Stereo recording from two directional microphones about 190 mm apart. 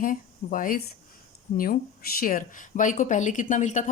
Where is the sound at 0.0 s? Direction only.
45° left (ahead or behind).